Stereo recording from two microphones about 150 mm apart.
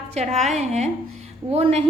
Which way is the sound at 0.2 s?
50° right (ahead or behind).